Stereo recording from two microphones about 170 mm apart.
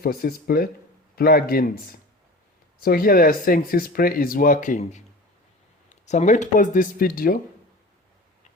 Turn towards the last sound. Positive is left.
turn(degrees=55)  # may be behind; listen again after turning